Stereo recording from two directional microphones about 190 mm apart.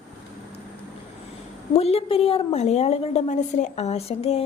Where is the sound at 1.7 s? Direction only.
30° left (ahead or behind).